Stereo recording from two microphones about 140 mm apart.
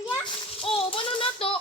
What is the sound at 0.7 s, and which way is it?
Speech, 40° left (ahead or behind).